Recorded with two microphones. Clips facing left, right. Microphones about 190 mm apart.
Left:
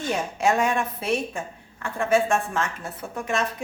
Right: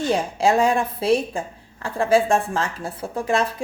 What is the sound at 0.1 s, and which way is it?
A woman's voice, 30° right (ahead or behind).